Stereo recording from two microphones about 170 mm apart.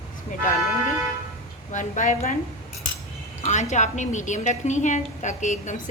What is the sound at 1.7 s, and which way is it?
Speech, 45° left (ahead or behind).